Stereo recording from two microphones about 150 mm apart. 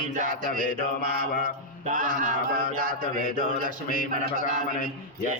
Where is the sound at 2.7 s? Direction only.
70° right (ahead or behind).